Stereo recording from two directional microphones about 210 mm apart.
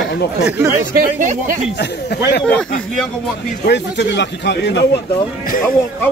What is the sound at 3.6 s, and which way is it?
Speech, 55° left (ahead or behind).